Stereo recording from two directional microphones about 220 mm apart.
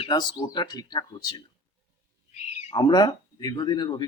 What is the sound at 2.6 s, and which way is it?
A man's voice, 20° left (ahead or behind).